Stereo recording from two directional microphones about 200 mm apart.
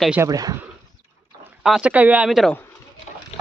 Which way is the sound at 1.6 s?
5° right (ahead or behind).